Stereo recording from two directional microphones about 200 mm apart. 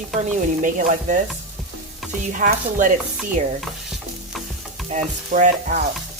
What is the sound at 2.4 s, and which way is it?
Speech, 40° right (ahead or behind).